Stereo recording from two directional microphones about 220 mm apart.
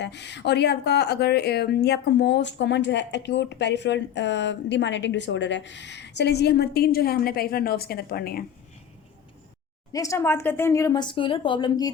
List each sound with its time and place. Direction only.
0.0 s speech: 50° left (ahead or behind)
9.9 s speech: 15° left (ahead or behind)